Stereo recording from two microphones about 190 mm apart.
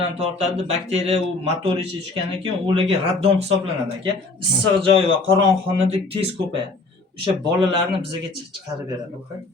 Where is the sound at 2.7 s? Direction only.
30° right (ahead or behind).